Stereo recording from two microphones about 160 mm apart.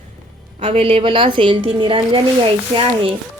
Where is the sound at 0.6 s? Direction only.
35° right (ahead or behind).